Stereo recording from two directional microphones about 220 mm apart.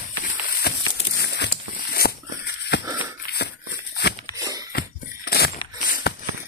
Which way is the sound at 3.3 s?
50° left (ahead or behind).